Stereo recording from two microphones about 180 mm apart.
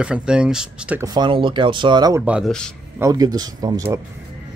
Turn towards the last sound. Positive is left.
turn(degrees=-20)  # may be behind; listen again after turning